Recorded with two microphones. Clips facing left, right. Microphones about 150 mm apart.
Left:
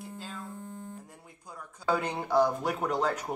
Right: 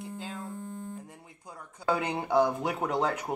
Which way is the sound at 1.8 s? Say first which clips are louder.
Right 1 dB; 15° right (ahead or behind).